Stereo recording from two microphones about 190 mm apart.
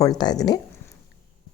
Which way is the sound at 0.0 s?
20° left (ahead or behind).